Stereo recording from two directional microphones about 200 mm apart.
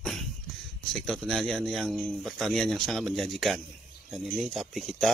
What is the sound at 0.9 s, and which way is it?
Speech, centre (ahead or behind).